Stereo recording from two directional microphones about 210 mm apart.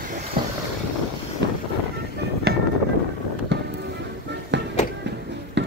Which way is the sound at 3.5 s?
55° right (ahead or behind).